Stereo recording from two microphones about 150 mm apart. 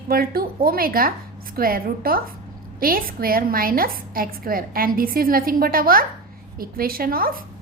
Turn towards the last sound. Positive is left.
turn(degrees=-75)  # may be behind; listen again after turning